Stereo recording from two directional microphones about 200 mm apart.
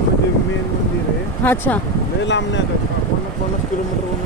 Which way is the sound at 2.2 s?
65° left (ahead or behind).